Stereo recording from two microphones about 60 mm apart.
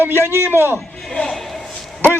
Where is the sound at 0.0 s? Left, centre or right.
Right.